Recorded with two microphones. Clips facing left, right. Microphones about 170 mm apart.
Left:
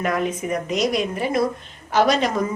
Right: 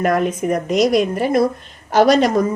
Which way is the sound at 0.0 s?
50° right (ahead or behind).